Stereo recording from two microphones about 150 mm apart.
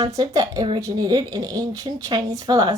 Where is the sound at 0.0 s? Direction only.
25° right (ahead or behind).